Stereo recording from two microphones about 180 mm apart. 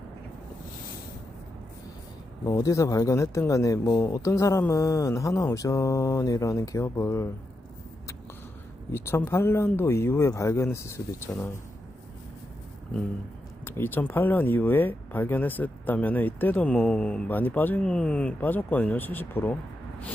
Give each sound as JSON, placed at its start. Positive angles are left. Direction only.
{"t": 2.5, "sound": "speech", "side_deg": 20}
{"t": 8.9, "sound": "speech", "side_deg": 15}
{"t": 13.7, "sound": "speech", "side_deg": 10}